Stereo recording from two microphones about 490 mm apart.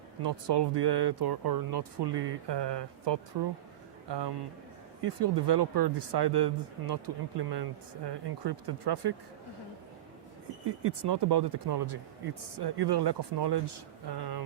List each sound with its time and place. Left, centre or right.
0.2 s speech: right
10.7 s speech: right